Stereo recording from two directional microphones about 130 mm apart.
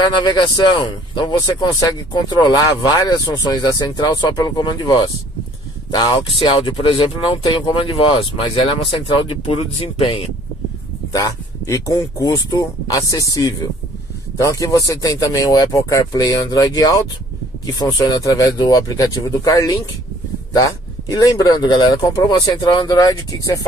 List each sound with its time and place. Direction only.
0.0 s speech: 35° left (ahead or behind)
11.1 s speech: 25° left (ahead or behind)
14.4 s speech: 25° left (ahead or behind)